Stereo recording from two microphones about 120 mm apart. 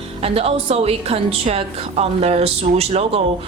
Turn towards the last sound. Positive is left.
turn(degrees=-60)  # may be behind; listen again after turning